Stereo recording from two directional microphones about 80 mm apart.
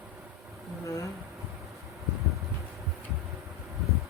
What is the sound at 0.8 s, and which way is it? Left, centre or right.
Insect, left.